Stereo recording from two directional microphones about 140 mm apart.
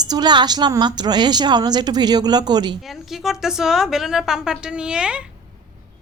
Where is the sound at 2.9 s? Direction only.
Centre (ahead or behind).